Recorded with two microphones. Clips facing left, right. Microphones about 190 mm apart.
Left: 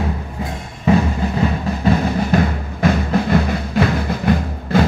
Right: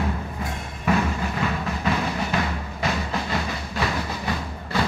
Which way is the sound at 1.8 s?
45° left (ahead or behind).